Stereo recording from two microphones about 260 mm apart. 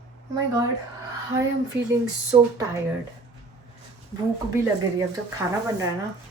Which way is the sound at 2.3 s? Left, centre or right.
Centre.